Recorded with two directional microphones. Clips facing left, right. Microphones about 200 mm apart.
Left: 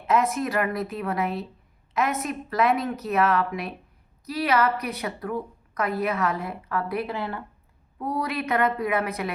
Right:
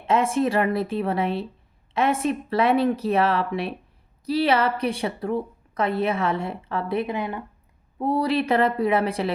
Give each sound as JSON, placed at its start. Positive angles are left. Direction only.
{"t": 0.1, "sound": "a woman's voice", "side_deg": -30}
{"t": 7.9, "sound": "a woman's voice", "side_deg": -30}